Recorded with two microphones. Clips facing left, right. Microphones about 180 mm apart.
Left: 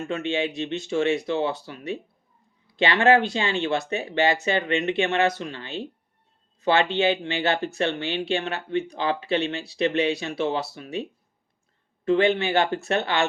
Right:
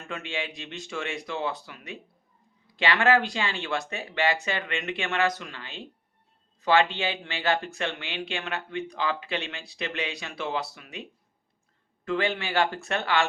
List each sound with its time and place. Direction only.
0.1 s speech: 25° left (ahead or behind)
12.0 s speech: 25° left (ahead or behind)